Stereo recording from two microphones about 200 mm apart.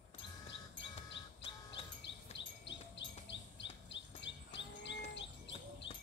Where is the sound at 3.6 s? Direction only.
65° left (ahead or behind).